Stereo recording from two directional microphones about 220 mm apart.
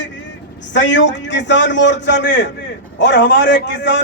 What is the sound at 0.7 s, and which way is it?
A man's voice, 55° left (ahead or behind).